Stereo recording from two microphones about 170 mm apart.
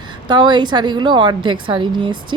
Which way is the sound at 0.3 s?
25° right (ahead or behind).